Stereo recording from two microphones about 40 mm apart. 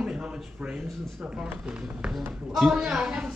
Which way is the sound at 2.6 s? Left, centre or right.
Centre.